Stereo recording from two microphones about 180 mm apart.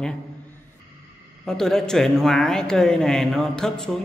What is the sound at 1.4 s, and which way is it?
Speech, 5° left (ahead or behind).